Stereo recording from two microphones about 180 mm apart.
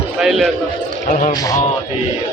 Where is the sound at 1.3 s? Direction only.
20° left (ahead or behind).